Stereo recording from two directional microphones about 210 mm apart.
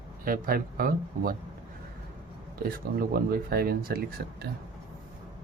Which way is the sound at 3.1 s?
45° right (ahead or behind).